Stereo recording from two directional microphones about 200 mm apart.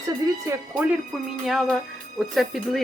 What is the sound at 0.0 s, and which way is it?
Speech, 20° right (ahead or behind).